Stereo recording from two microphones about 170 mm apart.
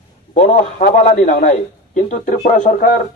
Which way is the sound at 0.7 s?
50° left (ahead or behind).